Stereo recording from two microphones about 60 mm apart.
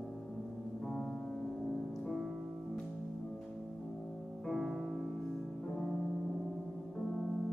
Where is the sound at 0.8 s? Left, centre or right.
Centre.